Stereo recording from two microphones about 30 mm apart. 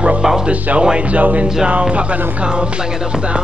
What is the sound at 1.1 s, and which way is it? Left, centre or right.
Speech, right.